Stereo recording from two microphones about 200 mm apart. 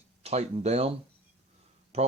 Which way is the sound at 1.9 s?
30° right (ahead or behind).